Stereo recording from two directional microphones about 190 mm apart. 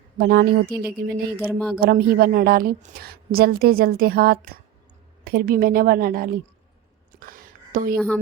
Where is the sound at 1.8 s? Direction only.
55° right (ahead or behind).